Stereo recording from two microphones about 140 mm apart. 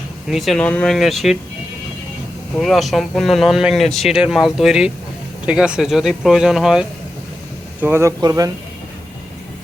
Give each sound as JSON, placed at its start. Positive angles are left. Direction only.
{"t": 0.3, "sound": "speech", "side_deg": 0}
{"t": 0.9, "sound": "speech", "side_deg": 0}
{"t": 2.6, "sound": "speech", "side_deg": 0}
{"t": 7.8, "sound": "speech", "side_deg": -15}